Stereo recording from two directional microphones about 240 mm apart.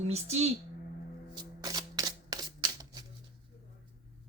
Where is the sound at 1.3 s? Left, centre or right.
Centre.